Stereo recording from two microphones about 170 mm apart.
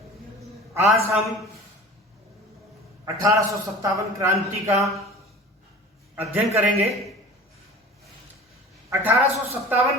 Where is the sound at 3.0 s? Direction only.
20° right (ahead or behind).